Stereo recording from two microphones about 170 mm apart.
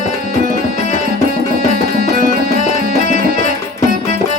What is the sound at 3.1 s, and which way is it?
Music, 55° right (ahead or behind).